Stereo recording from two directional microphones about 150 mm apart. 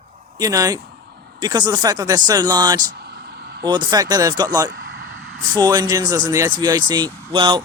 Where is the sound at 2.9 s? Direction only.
90° right.